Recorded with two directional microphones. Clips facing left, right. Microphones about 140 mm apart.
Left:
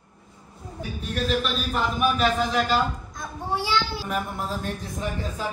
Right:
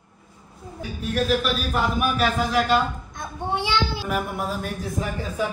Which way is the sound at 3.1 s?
25° right (ahead or behind).